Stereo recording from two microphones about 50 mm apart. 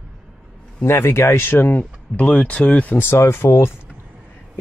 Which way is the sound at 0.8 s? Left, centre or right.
Left.